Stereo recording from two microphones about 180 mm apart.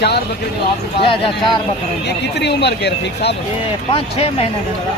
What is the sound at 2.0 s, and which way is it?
Speech, 70° left (ahead or behind).